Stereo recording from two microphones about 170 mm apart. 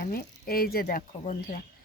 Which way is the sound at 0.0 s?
60° left (ahead or behind).